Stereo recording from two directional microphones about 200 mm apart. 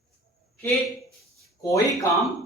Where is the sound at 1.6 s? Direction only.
15° left (ahead or behind).